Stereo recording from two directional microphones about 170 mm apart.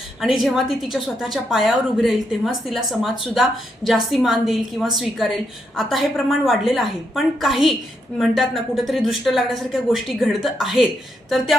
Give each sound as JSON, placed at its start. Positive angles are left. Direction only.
{"t": 0.4, "sound": "a woman's voice", "side_deg": 0}